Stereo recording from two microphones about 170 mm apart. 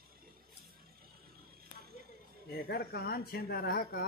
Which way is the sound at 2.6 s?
65° left (ahead or behind).